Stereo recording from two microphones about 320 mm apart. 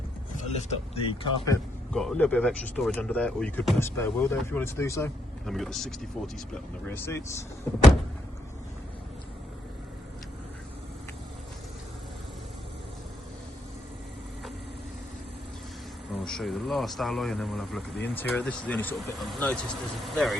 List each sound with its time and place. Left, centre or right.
1.0 s speech: centre
1.9 s speech: centre
16.2 s speech: centre